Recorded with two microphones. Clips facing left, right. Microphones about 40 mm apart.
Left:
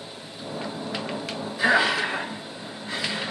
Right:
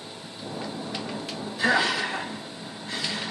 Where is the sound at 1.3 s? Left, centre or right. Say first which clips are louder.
Left 2 dB; centre.